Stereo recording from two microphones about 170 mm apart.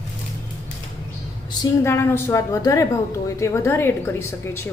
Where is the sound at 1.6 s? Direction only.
15° left (ahead or behind).